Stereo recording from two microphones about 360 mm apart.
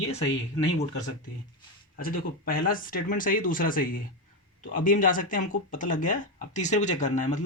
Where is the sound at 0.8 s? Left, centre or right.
Centre.